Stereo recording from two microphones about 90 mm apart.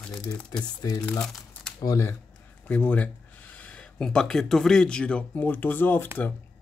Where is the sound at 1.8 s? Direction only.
35° left (ahead or behind).